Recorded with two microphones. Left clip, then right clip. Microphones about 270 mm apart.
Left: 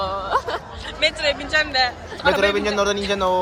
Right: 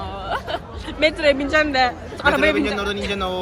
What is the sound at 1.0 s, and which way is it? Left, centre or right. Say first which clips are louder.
A man's voice: right 3 dB; right.